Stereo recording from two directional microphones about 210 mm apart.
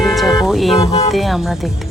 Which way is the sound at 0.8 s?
30° left (ahead or behind).